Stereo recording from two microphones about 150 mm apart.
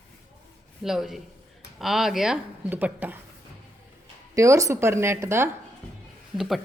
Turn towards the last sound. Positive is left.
turn(degrees=0)  # may be behind; listen again after turning